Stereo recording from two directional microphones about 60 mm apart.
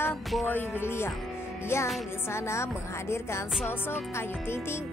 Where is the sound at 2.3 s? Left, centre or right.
Left.